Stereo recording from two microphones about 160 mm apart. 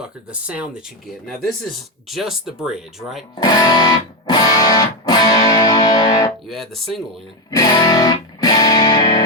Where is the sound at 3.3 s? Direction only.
25° left (ahead or behind).